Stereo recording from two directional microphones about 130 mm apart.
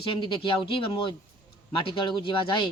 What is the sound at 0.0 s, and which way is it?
Speech, 40° left (ahead or behind).